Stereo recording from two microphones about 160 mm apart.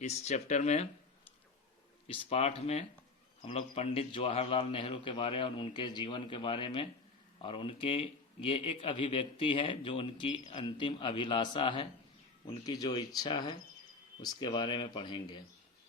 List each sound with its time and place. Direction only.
0.0 s speech: 45° left (ahead or behind)
2.0 s a man's voice: 40° left (ahead or behind)